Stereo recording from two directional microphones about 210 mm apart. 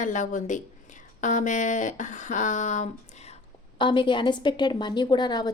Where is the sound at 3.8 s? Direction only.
20° left (ahead or behind).